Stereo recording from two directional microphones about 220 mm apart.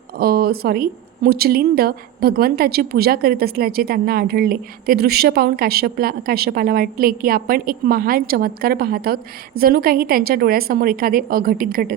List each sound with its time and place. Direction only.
0.2 s speech: 45° right (ahead or behind)